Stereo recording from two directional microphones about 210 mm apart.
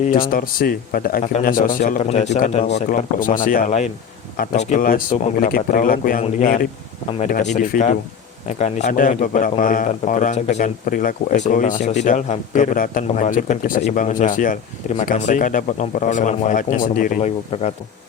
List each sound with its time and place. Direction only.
0.3 s a man's voice: 45° left (ahead or behind)